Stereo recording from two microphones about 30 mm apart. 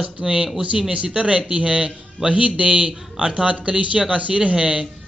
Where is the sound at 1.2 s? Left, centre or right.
Right.